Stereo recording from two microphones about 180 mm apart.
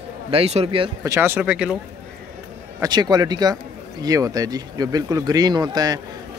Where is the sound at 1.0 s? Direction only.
15° right (ahead or behind).